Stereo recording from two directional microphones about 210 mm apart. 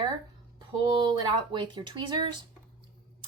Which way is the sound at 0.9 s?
20° right (ahead or behind).